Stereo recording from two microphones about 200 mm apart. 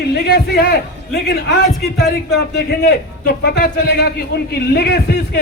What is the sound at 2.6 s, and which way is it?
A woman's voice, 55° left (ahead or behind).